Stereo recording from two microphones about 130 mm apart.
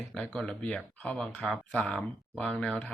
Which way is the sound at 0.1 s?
5° left (ahead or behind).